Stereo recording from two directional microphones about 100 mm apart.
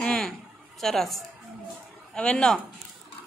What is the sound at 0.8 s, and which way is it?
A woman's voice, 5° left (ahead or behind).